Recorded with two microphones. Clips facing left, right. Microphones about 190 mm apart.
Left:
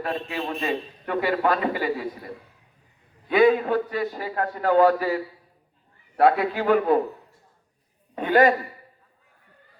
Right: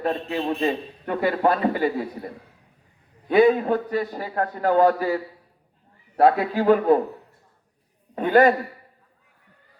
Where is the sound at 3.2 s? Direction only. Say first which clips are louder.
Right 1 dB; 40° right (ahead or behind).